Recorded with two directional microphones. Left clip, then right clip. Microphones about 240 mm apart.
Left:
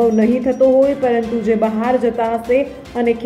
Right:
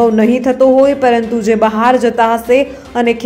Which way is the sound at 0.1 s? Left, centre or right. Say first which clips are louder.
Right 4 dB; centre.